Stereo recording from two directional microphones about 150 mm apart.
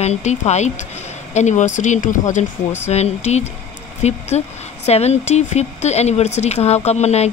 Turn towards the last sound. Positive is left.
turn(degrees=45)  # may be behind; listen again after turning